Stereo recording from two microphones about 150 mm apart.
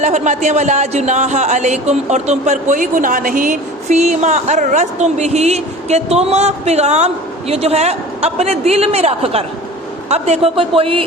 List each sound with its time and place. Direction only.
0.0 s a man's voice: 50° right (ahead or behind)